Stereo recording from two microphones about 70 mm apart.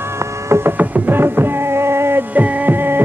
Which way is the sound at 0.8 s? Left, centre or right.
Right.